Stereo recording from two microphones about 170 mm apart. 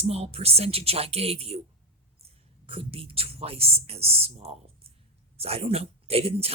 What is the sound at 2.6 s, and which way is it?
Speech, 35° right (ahead or behind).